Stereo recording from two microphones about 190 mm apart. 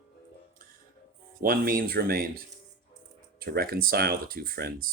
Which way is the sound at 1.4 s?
50° right (ahead or behind).